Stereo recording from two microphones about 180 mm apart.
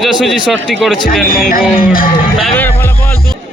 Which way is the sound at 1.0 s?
55° left (ahead or behind).